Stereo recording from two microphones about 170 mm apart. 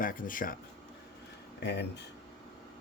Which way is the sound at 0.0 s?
55° left (ahead or behind).